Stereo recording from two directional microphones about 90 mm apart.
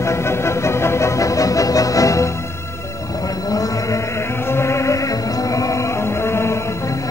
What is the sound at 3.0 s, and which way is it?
Chant, 40° left (ahead or behind).